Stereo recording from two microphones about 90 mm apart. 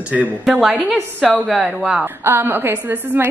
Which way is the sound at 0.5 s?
5° right (ahead or behind).